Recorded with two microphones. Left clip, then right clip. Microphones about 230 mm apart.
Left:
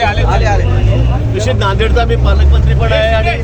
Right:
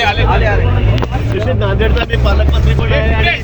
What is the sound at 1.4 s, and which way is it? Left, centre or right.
Speech, left.